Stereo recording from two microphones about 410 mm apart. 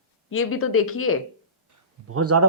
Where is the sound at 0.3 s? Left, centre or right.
Left.